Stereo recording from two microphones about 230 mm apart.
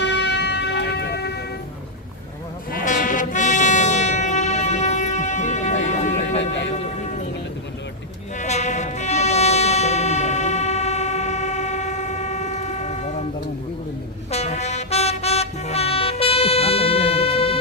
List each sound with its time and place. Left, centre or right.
0.0 s music: left
2.7 s music: left
6.1 s a sound: left
8.4 s music: left
14.3 s vehicle: left